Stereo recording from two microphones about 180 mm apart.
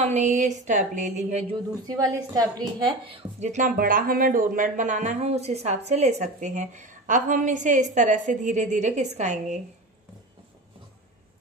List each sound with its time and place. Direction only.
0.0 s a woman's voice: 40° right (ahead or behind)
1.9 s a woman's voice: 20° right (ahead or behind); by 9.6 s 40° right (ahead or behind)